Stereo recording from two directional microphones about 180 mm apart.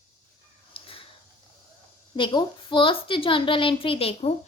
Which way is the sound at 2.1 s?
25° left (ahead or behind).